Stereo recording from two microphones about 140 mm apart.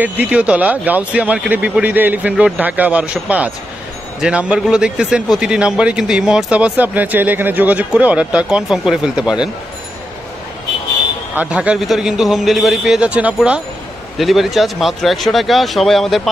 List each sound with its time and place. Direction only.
0.0 s a man's voice: 10° right (ahead or behind)
11.3 s a man's voice: 10° right (ahead or behind)